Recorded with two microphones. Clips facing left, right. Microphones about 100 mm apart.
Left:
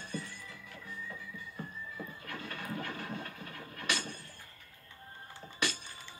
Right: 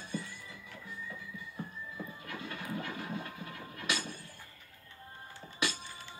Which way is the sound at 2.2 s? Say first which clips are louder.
Even; 20° right (ahead or behind).